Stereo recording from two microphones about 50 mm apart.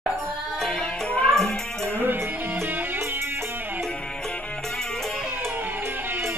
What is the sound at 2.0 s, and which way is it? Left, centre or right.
Music, right.